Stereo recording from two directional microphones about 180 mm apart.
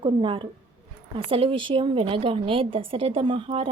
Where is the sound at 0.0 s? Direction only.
30° right (ahead or behind).